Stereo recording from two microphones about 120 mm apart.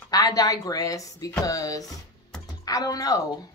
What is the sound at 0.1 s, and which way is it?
A woman's voice, 30° left (ahead or behind).